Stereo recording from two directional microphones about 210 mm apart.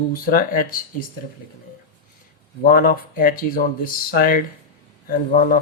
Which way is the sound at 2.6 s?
45° left (ahead or behind).